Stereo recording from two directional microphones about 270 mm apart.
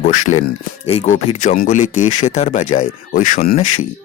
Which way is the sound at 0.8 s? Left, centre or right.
Left.